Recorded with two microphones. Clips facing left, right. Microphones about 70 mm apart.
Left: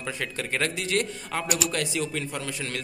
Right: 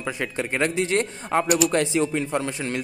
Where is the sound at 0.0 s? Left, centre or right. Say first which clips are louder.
Right 4 dB; right.